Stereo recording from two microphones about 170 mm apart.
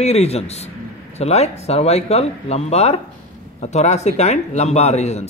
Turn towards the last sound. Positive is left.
turn(degrees=40)  # may be behind; listen again after turning